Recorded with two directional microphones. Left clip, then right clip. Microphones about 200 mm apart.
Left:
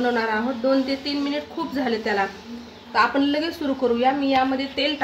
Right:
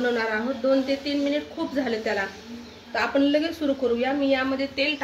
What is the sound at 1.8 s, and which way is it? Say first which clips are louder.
Speech: left 5 dB; 60° left (ahead or behind).